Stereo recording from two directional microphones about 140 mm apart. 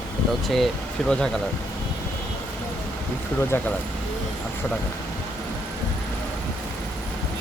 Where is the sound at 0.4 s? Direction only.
Centre (ahead or behind).